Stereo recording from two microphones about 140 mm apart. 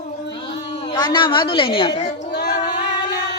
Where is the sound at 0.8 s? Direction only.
30° left (ahead or behind).